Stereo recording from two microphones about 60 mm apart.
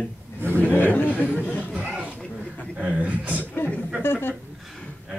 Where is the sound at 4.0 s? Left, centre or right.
Left.